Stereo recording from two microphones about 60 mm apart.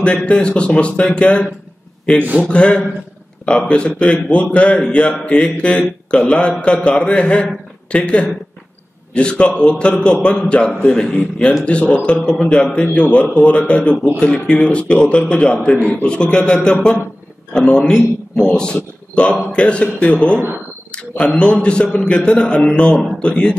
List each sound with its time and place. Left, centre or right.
0.0 s a man's voice: centre